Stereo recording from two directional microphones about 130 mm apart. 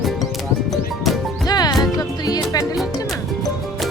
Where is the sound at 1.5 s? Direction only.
30° left (ahead or behind).